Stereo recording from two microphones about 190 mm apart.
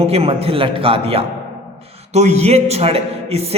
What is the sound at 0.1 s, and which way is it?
A man's voice, 30° right (ahead or behind).